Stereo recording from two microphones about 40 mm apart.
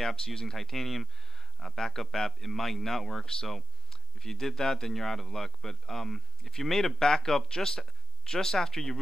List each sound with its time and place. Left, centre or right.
0.0 s speech: centre